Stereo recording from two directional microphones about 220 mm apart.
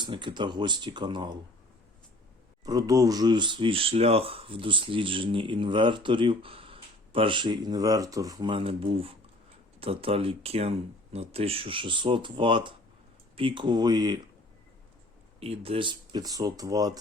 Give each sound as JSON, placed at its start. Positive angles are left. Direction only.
{"t": 0.0, "sound": "speech", "side_deg": -20}
{"t": 2.6, "sound": "speech", "side_deg": -15}
{"t": 15.4, "sound": "speech", "side_deg": -25}